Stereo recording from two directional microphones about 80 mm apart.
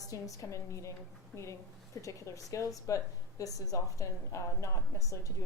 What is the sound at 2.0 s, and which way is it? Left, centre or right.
A woman's voice, left.